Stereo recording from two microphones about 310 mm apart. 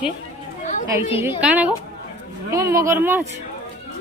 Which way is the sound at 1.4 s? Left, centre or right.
Centre.